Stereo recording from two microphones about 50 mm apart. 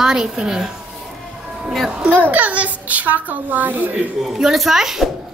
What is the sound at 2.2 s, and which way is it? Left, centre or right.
A child's voice, right.